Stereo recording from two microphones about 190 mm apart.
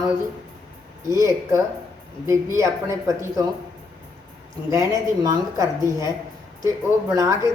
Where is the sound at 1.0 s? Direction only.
15° right (ahead or behind).